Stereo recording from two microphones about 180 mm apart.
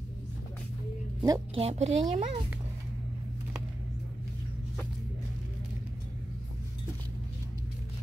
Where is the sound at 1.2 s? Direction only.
20° right (ahead or behind).